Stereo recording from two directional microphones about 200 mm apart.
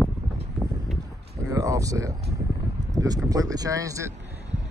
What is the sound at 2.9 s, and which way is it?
Speech, 20° right (ahead or behind).